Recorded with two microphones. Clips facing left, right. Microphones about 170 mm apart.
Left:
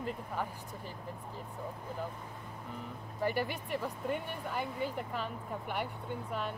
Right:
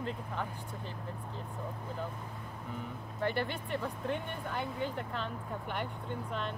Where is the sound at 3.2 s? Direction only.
10° left (ahead or behind).